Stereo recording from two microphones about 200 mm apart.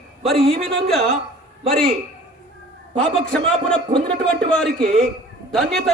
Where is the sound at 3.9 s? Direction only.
25° right (ahead or behind).